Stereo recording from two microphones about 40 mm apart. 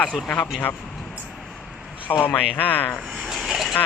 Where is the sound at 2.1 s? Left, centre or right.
Left.